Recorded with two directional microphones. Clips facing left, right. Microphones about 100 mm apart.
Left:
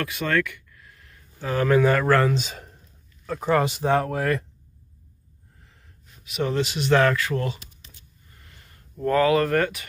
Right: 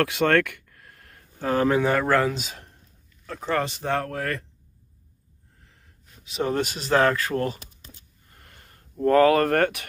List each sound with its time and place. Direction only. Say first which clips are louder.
0.0 s a sound: right 4 dB; 70° right (ahead or behind); by 1.6 s 50° right (ahead or behind)
1.6 s speech: left 3 dB; 20° right (ahead or behind)
3.3 s speech: left 4 dB; 10° left (ahead or behind)
6.2 s speech: even; 30° right (ahead or behind)
6.5 s speech: left 1 dB; 50° right (ahead or behind)
6.8 s speech: left 1 dB; 30° right (ahead or behind)
8.3 s a sound: right 2 dB; 50° right (ahead or behind)
9.0 s speech: right 2 dB; 40° right (ahead or behind); by 9.8 s 60° right (ahead or behind)